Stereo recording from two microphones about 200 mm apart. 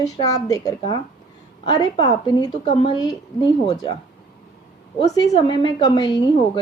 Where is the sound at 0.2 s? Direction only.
20° left (ahead or behind).